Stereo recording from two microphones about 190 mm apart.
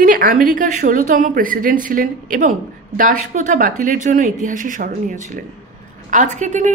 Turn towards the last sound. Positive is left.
turn(degrees=-40)  # may be behind; listen again after turning